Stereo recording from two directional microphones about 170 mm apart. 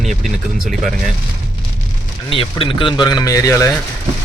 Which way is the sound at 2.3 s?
30° left (ahead or behind).